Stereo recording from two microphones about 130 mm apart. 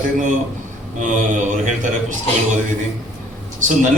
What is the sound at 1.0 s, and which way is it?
Speech, 75° right (ahead or behind).